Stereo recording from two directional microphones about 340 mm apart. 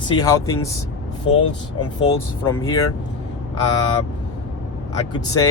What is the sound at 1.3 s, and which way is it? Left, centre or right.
Speech, left.